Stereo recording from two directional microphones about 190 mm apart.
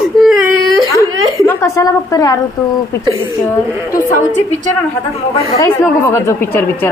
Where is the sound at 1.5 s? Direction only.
15° left (ahead or behind).